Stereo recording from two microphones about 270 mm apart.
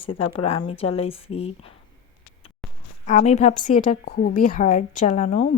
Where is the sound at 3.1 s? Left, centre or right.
Left.